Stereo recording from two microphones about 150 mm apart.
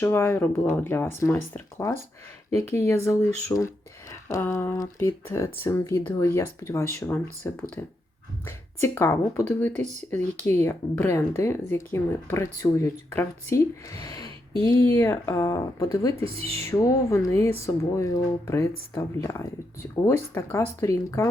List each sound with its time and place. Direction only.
0.0 s speech: 15° left (ahead or behind)
16.2 s speech: 40° right (ahead or behind)
16.6 s speech: 20° left (ahead or behind)